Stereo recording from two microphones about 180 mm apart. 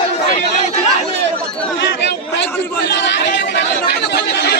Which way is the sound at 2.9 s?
75° left (ahead or behind).